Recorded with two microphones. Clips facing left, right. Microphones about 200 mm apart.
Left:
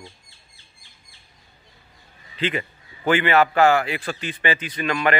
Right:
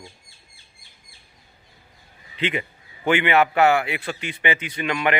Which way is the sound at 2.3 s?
15° right (ahead or behind).